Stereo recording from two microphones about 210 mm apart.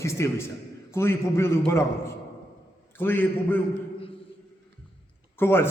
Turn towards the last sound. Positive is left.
turn(degrees=10)  # may be behind; listen again after turning